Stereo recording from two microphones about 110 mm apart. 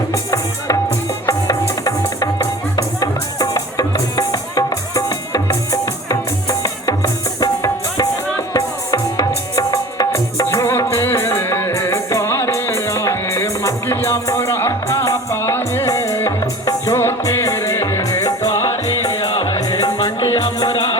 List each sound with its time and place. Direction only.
0.1 s music: 30° left (ahead or behind)